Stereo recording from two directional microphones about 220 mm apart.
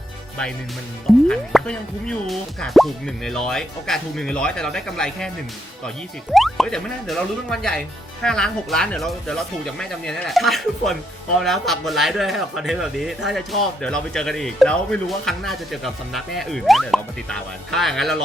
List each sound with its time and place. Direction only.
1.3 s speech: 5° left (ahead or behind)
6.3 s speech: centre (ahead or behind)